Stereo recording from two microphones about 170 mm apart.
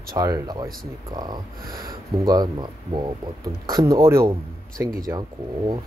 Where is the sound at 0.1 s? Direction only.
20° right (ahead or behind).